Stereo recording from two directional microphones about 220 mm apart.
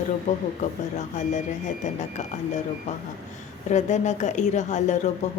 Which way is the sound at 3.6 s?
35° left (ahead or behind).